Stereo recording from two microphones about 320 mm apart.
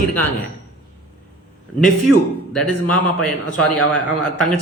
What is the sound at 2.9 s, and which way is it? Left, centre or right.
Speech, centre.